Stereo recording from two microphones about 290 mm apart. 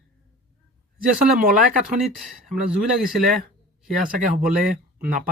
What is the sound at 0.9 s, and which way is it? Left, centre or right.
Speech, right.